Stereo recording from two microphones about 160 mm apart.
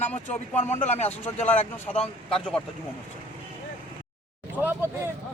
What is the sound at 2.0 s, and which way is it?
Speech, 35° left (ahead or behind).